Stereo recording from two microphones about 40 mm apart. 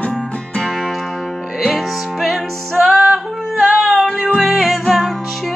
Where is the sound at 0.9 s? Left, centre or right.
Centre.